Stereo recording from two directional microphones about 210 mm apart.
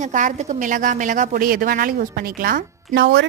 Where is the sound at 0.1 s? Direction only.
40° right (ahead or behind).